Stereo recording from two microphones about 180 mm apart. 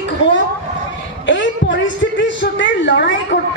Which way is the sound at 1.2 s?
90° left.